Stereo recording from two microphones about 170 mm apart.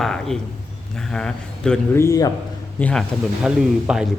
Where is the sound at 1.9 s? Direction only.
20° left (ahead or behind).